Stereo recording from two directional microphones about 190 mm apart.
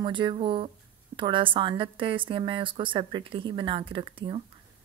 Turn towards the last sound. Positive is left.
turn(degrees=-25)  # may be behind; listen again after turning